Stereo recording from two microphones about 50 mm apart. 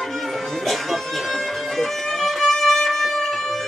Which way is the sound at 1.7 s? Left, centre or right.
Centre.